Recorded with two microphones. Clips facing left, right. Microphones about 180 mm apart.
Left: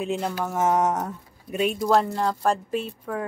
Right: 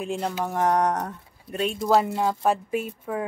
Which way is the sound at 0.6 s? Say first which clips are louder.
Even; 5° left (ahead or behind).